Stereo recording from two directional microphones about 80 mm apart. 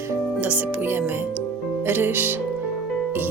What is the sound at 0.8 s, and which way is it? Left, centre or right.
Speech, right.